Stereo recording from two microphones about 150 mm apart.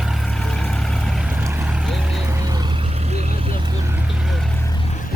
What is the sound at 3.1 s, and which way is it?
Vehicle, 45° right (ahead or behind).